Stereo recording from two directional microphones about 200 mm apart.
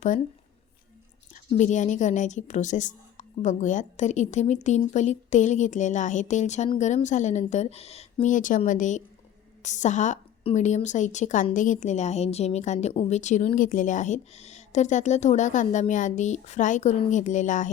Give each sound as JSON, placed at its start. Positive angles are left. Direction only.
{"t": 1.5, "sound": "a woman's voice", "side_deg": 35}